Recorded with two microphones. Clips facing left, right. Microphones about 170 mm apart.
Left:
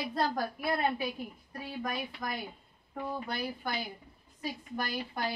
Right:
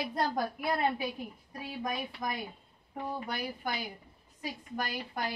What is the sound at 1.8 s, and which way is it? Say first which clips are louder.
Speech: right 2 dB; 20° right (ahead or behind).